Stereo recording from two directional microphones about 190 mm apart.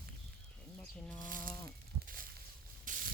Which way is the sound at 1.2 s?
45° right (ahead or behind).